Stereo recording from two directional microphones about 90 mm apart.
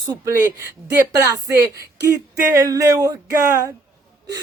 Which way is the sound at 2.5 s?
35° right (ahead or behind).